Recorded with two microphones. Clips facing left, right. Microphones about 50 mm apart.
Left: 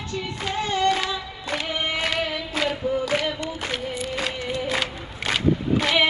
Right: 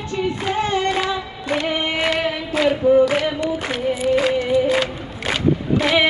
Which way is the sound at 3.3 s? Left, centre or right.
Centre.